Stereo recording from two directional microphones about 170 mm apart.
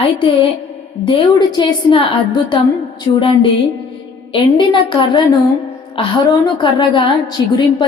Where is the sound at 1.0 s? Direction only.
25° left (ahead or behind).